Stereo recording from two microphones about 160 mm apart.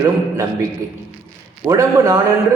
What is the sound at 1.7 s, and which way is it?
Speech, 20° right (ahead or behind).